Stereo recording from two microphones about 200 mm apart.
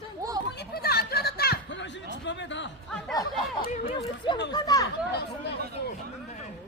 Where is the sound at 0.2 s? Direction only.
15° right (ahead or behind).